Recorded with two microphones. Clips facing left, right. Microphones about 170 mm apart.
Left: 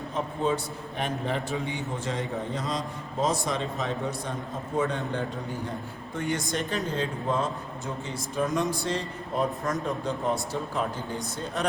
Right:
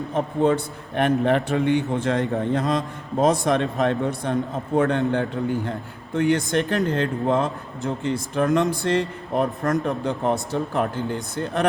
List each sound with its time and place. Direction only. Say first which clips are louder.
0.1 s a man's voice: right 7 dB; 55° right (ahead or behind)